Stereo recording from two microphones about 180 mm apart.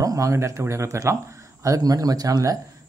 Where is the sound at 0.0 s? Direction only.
20° right (ahead or behind).